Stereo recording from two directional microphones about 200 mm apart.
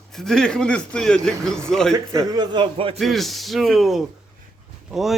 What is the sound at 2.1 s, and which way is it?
Speech, 20° right (ahead or behind).